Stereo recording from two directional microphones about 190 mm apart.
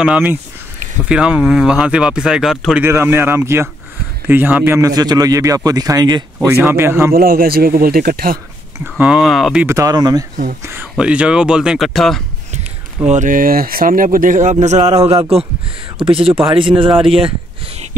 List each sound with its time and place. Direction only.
0.0 s a man's voice: 5° right (ahead or behind)
7.2 s speech: 50° right (ahead or behind)
8.7 s speech: 5° right (ahead or behind)
9.7 s speech: 15° right (ahead or behind)
10.7 s speech: 10° right (ahead or behind)
13.1 s speech: 45° right (ahead or behind); by 16.9 s 25° right (ahead or behind)